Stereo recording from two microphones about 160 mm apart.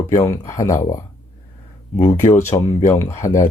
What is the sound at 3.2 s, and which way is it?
Speech, 55° left (ahead or behind).